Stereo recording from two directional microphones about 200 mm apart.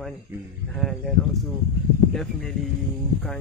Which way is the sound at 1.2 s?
Centre (ahead or behind).